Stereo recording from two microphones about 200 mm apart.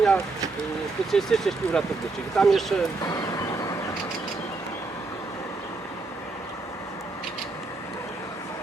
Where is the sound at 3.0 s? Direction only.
15° left (ahead or behind).